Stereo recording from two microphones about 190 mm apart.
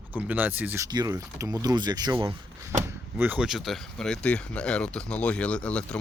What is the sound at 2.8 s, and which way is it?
Speech, 10° right (ahead or behind).